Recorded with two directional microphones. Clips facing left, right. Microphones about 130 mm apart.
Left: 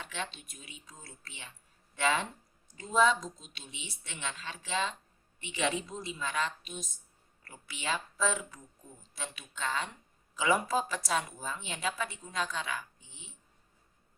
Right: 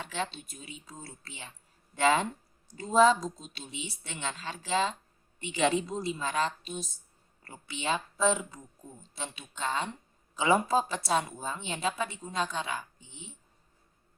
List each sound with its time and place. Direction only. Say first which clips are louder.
0.0 s a woman's voice: right 5 dB; 35° right (ahead or behind)